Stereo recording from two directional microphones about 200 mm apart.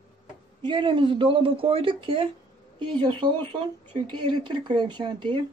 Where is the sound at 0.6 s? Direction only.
25° right (ahead or behind).